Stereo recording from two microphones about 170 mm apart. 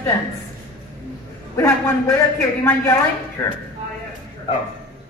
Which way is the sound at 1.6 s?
15° left (ahead or behind).